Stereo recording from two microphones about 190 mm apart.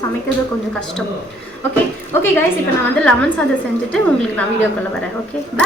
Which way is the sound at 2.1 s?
10° left (ahead or behind).